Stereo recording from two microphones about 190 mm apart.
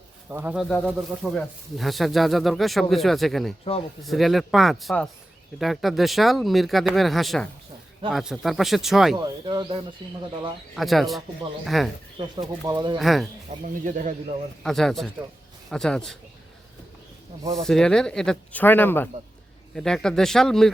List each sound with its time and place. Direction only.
0.3 s speech: 10° right (ahead or behind)
3.6 s speech: 30° left (ahead or behind)
4.0 s speech: centre (ahead or behind)
9.2 s speech: 20° right (ahead or behind)
10.8 s speech: centre (ahead or behind)
12.2 s speech: 20° right (ahead or behind)
13.0 s speech: centre (ahead or behind)
13.5 s speech: 40° right (ahead or behind)
14.6 s speech: centre (ahead or behind)
17.6 s speech: 5° left (ahead or behind)